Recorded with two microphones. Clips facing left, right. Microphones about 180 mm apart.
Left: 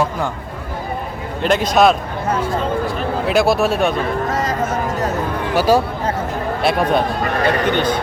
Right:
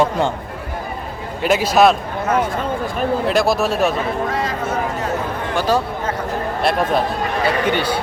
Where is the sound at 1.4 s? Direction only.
5° right (ahead or behind).